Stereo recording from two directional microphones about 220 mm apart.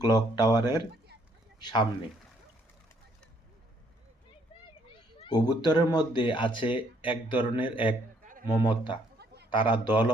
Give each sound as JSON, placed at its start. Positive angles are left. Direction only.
{"t": 0.0, "sound": "speech", "side_deg": 20}
{"t": 5.2, "sound": "speech", "side_deg": 20}
{"t": 8.2, "sound": "a sound", "side_deg": -35}
{"t": 8.4, "sound": "speech", "side_deg": 20}
{"t": 9.1, "sound": "a sound", "side_deg": -50}
{"t": 9.5, "sound": "speech", "side_deg": 20}